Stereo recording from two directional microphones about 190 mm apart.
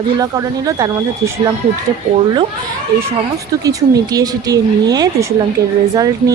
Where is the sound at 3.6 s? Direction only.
20° right (ahead or behind).